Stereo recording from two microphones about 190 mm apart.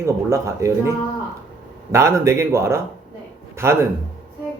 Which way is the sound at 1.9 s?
15° right (ahead or behind).